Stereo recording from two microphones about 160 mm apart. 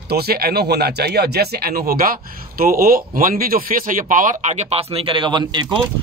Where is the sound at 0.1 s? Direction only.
75° right (ahead or behind).